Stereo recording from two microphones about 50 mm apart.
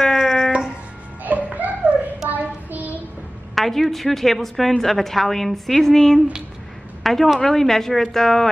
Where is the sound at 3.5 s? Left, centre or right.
Centre.